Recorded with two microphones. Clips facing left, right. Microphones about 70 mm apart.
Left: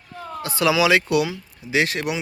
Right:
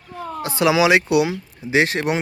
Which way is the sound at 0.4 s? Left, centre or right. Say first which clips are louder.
Right 2 dB; right.